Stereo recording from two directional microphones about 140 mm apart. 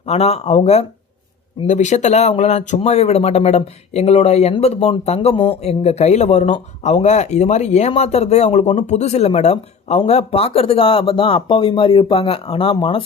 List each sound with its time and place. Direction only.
0.0 s a man's voice: 50° left (ahead or behind)
1.6 s a man's voice: 60° left (ahead or behind); by 13.1 s 40° left (ahead or behind)